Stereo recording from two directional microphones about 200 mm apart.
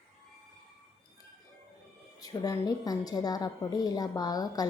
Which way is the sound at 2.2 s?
20° left (ahead or behind).